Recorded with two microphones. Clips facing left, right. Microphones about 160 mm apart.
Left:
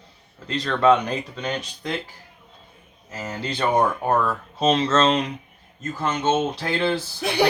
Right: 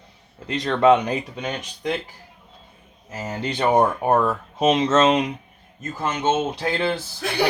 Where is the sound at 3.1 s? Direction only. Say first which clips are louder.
Right 2 dB; 20° right (ahead or behind).